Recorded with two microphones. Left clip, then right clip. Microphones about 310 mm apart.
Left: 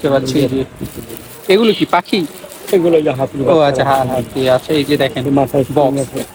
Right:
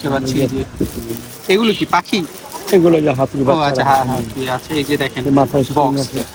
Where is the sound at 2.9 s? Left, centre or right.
Right.